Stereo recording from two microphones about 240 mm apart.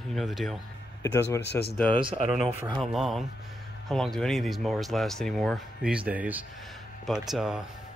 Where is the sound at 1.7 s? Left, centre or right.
Centre.